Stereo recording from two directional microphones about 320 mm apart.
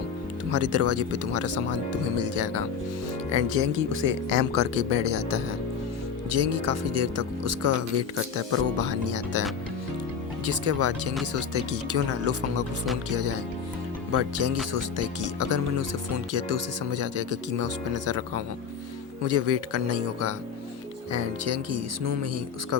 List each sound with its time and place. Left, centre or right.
0.5 s speech: right
10.4 s speech: right